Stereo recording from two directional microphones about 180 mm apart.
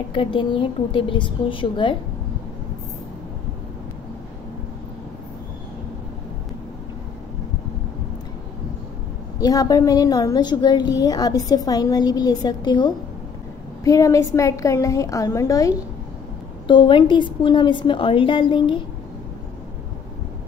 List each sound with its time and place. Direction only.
0.1 s a woman's voice: 30° left (ahead or behind)
9.4 s a woman's voice: 20° left (ahead or behind)